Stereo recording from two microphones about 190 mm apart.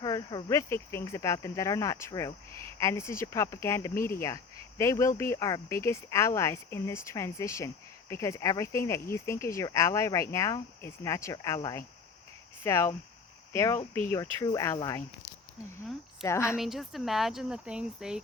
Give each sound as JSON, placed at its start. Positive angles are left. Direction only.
{"t": 0.0, "sound": "speech", "side_deg": 20}
{"t": 16.2, "sound": "speech", "side_deg": 15}
{"t": 16.6, "sound": "speech", "side_deg": 0}